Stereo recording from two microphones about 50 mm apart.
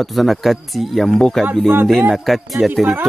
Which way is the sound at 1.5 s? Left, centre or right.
Right.